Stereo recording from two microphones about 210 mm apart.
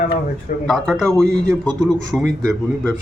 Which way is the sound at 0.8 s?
5° left (ahead or behind).